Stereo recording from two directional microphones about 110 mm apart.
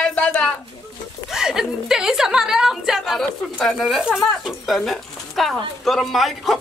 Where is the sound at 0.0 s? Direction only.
10° left (ahead or behind).